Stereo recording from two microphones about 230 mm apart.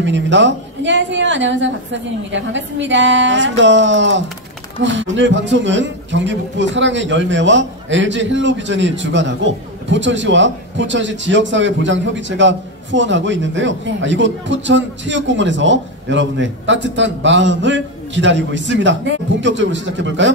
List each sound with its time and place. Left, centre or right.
0.0 s a man's voice: right